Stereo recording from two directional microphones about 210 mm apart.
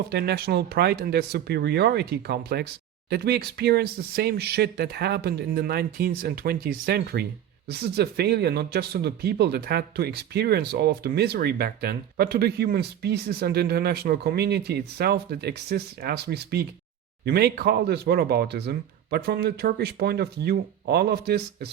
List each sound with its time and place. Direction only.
0.1 s speech: 50° right (ahead or behind)